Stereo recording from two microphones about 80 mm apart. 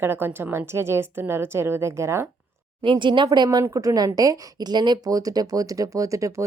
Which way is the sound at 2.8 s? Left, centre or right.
Right.